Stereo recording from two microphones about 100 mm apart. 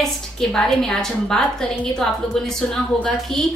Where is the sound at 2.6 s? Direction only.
5° left (ahead or behind).